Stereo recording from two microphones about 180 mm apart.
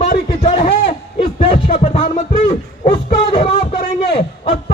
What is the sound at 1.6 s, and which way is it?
Music, 35° left (ahead or behind).